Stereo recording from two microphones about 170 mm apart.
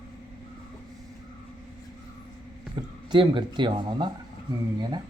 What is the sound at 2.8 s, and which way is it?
Speech, 25° right (ahead or behind).